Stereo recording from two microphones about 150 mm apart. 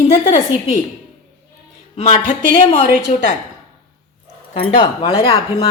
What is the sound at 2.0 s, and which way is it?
Speech, 55° left (ahead or behind).